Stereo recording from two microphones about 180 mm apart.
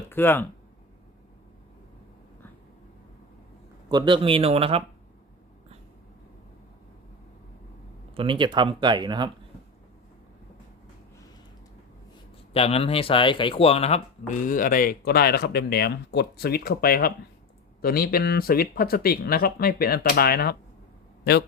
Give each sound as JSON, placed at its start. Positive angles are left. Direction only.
{"t": 0.1, "sound": "speech", "side_deg": 10}
{"t": 3.8, "sound": "speech", "side_deg": -25}
{"t": 8.1, "sound": "speech", "side_deg": -30}
{"t": 12.5, "sound": "speech", "side_deg": 35}